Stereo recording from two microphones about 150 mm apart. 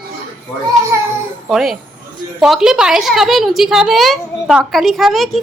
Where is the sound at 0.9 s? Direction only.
15° right (ahead or behind).